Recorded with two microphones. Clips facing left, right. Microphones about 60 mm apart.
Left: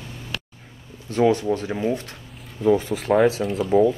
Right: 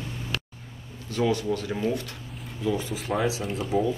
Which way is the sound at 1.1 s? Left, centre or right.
Left.